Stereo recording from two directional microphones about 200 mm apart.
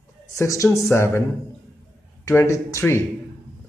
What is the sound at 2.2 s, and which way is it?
Speech, 15° left (ahead or behind).